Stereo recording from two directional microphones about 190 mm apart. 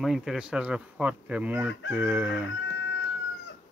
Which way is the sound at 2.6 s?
70° left (ahead or behind).